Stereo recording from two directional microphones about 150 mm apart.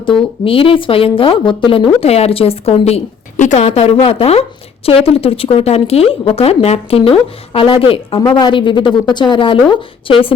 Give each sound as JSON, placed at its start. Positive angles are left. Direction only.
{"t": 0.4, "sound": "speech", "side_deg": 35}